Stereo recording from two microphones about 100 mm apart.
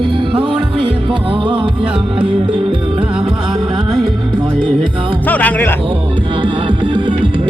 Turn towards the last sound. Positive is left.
turn(degrees=-50)  # may be behind; listen again after turning